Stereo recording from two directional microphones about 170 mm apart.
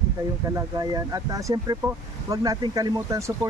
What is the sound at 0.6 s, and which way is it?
Speech, 20° right (ahead or behind).